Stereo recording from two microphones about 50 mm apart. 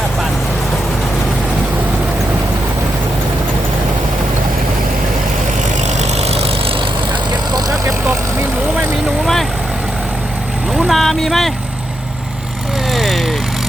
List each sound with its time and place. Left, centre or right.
8.0 s vehicle: right
9.2 s vehicle: centre
10.8 s boat: centre
12.9 s vehicle: centre